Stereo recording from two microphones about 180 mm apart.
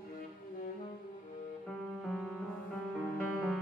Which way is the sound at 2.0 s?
Centre (ahead or behind).